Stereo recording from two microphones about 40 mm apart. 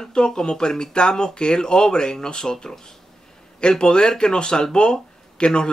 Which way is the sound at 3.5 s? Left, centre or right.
Left.